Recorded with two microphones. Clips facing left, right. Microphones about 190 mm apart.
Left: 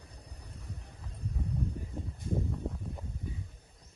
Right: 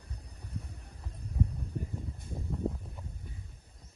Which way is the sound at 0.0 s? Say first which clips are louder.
Right 1 dB; centre (ahead or behind).